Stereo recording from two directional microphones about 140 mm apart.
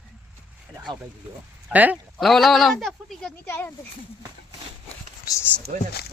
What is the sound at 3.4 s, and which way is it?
Speech, 15° left (ahead or behind).